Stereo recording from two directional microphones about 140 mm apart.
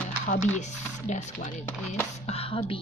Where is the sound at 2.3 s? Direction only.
45° left (ahead or behind).